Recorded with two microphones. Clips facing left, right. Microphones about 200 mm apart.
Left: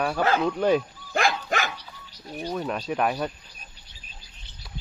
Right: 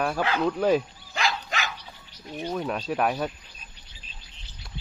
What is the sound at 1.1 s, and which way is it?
Dog, 50° left (ahead or behind).